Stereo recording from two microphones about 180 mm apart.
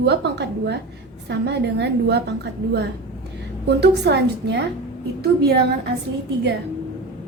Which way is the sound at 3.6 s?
70° right (ahead or behind).